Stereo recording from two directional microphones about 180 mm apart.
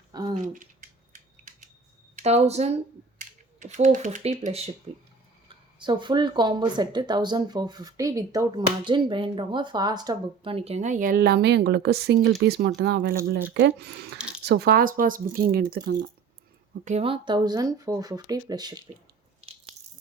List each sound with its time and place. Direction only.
0.1 s a sound: 25° right (ahead or behind)
0.3 s speech: 45° right (ahead or behind)
2.1 s speech: 35° right (ahead or behind)
5.8 s speech: 25° right (ahead or behind); by 14.2 s 65° right (ahead or behind)
14.2 s a sound: 5° right (ahead or behind)
14.4 s speech: 65° right (ahead or behind)
16.8 s speech: 35° right (ahead or behind)